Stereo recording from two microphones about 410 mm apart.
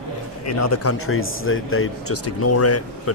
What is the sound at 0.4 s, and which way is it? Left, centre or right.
Speech, left.